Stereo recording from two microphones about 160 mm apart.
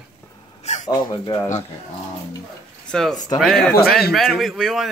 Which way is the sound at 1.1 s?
25° left (ahead or behind).